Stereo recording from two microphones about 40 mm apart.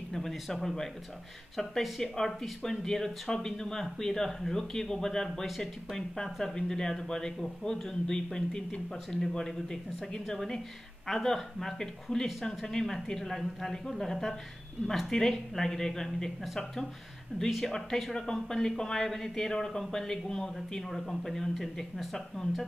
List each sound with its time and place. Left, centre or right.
0.1 s speech: centre
17.5 s speech: centre
17.7 s speech: centre